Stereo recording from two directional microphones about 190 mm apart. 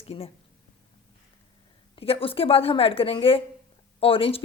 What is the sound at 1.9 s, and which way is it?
A woman's voice, 30° left (ahead or behind).